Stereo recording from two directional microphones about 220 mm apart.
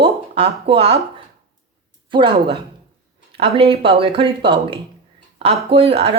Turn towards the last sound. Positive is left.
turn(degrees=-25)  # may be behind; listen again after turning